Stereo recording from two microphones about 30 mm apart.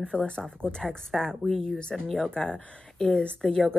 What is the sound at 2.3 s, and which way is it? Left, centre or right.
Speech, left.